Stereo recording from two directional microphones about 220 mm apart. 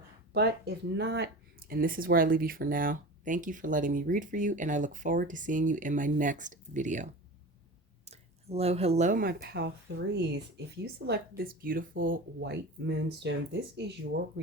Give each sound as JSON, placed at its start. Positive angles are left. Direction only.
{"t": 0.3, "sound": "speech", "side_deg": -50}